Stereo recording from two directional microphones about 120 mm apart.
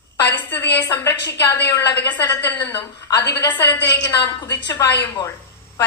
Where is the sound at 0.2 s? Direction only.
20° left (ahead or behind).